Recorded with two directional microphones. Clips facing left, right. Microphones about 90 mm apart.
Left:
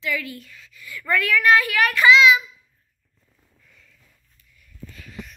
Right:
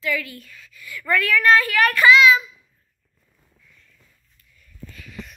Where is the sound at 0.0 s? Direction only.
25° left (ahead or behind).